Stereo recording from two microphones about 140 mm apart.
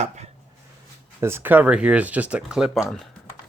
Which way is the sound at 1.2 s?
15° right (ahead or behind).